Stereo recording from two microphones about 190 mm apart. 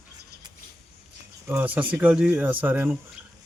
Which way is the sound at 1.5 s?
10° right (ahead or behind).